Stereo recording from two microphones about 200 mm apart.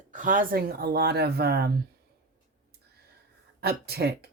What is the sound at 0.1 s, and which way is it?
Speech, 40° right (ahead or behind).